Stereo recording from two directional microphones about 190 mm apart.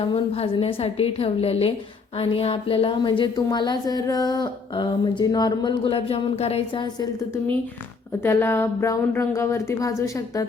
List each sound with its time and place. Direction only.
0.0 s a woman's voice: 30° left (ahead or behind)
8.2 s speech: 10° left (ahead or behind)